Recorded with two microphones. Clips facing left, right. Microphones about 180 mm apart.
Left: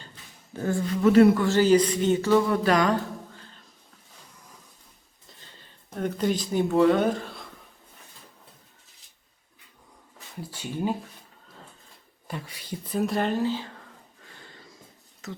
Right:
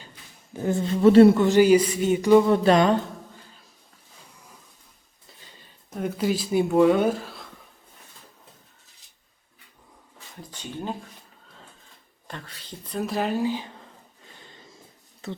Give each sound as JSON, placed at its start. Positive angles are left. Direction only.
{"t": 0.5, "sound": "speech", "side_deg": -20}
{"t": 5.4, "sound": "speech", "side_deg": -10}
{"t": 10.4, "sound": "speech", "side_deg": 10}
{"t": 12.3, "sound": "speech", "side_deg": 10}
{"t": 15.2, "sound": "speech", "side_deg": -30}